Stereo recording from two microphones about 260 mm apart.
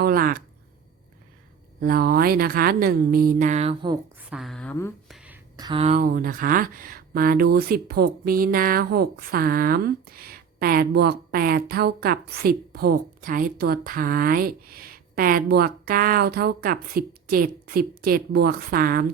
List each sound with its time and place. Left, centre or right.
0.0 s a sound: right
1.8 s speech: right
4.3 s speech: centre
5.5 s speech: centre; by 19.0 s right